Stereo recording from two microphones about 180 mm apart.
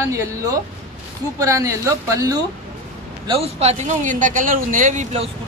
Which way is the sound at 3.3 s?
35° right (ahead or behind).